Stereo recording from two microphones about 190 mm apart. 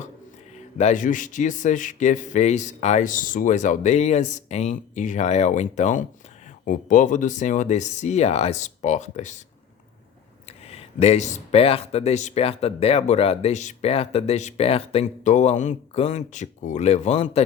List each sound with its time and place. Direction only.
0.8 s speech: 40° left (ahead or behind)
10.7 s speech: 35° left (ahead or behind)